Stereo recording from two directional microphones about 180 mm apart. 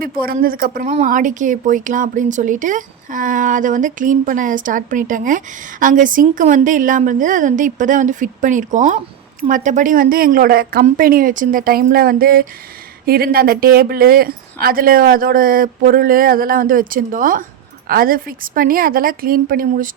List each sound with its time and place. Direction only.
0.0 s speech: 55° right (ahead or behind)